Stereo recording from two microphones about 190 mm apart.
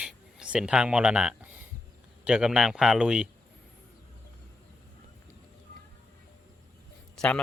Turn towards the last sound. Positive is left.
turn(degrees=5)  # may be behind; listen again after turning